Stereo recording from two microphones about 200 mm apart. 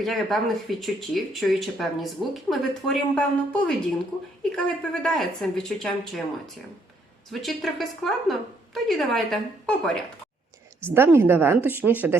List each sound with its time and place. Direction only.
0.0 s speech: centre (ahead or behind)
10.9 s speech: 10° right (ahead or behind)